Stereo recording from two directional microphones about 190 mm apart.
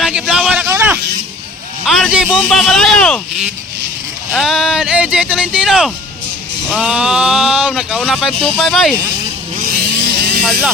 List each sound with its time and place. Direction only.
0.0 s a sound: 5° right (ahead or behind)
1.8 s speech: 5° right (ahead or behind)
9.6 s vehicle: 50° right (ahead or behind)